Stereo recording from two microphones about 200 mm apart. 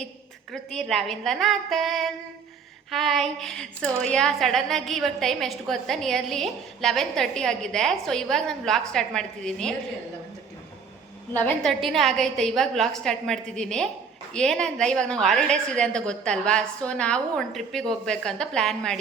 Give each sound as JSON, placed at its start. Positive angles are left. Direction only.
{"t": 0.5, "sound": "a woman's voice", "side_deg": 0}
{"t": 11.3, "sound": "a woman's voice", "side_deg": 5}